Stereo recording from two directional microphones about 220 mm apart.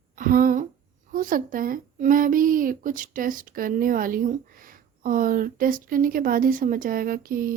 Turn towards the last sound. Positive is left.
turn(degrees=-40)  # may be behind; listen again after turning